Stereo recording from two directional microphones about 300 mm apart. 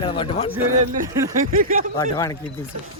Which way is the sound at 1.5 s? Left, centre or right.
Right.